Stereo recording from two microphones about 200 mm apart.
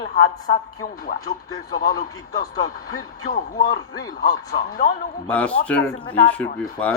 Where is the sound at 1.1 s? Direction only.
45° left (ahead or behind).